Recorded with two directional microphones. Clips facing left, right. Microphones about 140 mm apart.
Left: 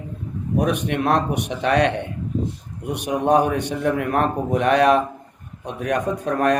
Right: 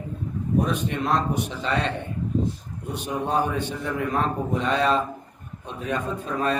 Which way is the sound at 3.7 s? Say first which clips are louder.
Left 5 dB; 70° left (ahead or behind).